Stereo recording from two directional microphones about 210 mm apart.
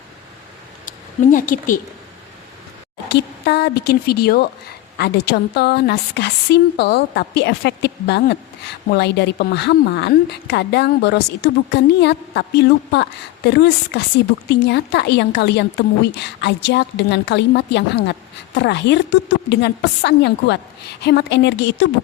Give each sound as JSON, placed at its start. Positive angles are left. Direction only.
{"t": 0.9, "sound": "a woman's voice", "side_deg": 40}
{"t": 3.1, "sound": "a woman's voice", "side_deg": 50}